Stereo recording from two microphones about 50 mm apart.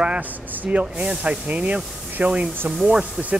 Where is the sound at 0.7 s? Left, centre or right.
Right.